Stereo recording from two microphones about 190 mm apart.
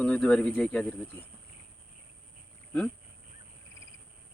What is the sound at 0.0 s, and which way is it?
Speech, 5° left (ahead or behind).